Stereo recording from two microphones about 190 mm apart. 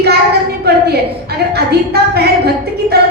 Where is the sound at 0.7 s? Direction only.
60° right (ahead or behind).